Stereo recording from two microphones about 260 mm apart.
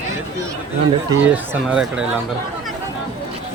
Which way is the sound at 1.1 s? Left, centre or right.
Centre.